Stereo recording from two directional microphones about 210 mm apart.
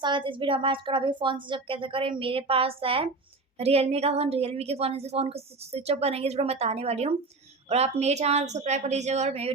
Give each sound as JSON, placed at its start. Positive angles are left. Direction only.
{"t": 0.0, "sound": "a woman's voice", "side_deg": -25}